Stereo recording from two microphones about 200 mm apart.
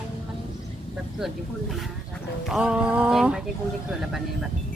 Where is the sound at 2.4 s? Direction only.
5° right (ahead or behind).